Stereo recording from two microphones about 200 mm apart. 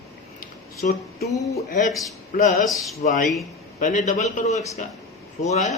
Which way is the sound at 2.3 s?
40° left (ahead or behind).